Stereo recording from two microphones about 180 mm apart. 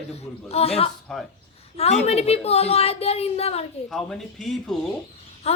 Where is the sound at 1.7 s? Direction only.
35° left (ahead or behind).